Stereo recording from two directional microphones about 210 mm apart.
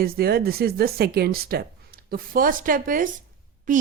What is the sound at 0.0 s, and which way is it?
A woman's voice, 45° right (ahead or behind).